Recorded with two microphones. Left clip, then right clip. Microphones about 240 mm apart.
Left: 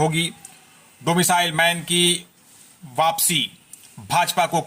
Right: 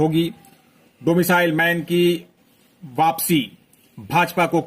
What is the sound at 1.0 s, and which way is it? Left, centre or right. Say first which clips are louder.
A man's voice: right 2 dB; centre.